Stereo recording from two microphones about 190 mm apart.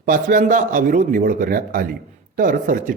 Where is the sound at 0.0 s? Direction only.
45° right (ahead or behind).